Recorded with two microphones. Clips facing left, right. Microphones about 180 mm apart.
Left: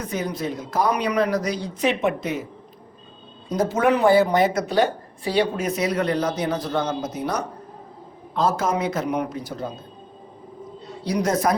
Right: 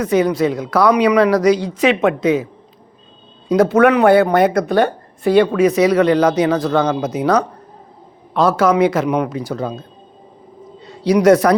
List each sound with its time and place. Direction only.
0.0 s a man's voice: 85° right
3.5 s speech: 70° right (ahead or behind); by 5.5 s 55° right (ahead or behind)
5.5 s a man's voice: 80° right
10.8 s a man's voice: 75° right (ahead or behind)